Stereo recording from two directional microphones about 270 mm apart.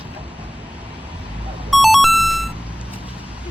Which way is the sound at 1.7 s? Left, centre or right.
Centre.